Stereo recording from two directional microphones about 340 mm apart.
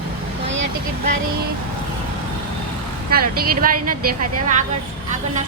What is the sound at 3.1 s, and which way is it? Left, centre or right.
A woman's voice, right.